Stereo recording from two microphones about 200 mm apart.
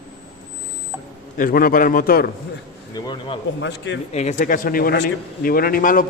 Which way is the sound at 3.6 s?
60° left (ahead or behind).